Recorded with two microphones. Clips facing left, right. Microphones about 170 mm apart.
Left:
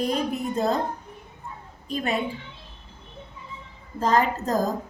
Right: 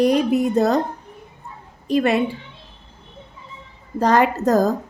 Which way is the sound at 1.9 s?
75° right (ahead or behind).